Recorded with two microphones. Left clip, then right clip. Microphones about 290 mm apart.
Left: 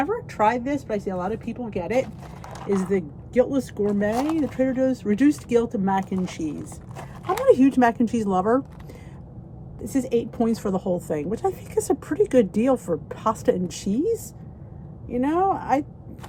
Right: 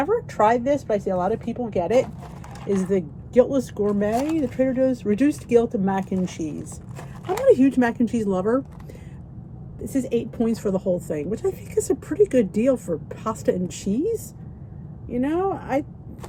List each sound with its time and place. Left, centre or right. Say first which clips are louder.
0.0 s speech: right 2 dB; centre
2.6 s speech: even; centre
2.9 s speech: right 6 dB; centre
9.9 s speech: left 1 dB; centre